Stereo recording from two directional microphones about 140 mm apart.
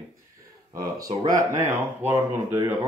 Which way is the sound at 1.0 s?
25° right (ahead or behind).